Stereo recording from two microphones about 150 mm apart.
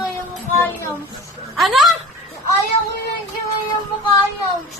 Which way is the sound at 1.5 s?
Centre (ahead or behind).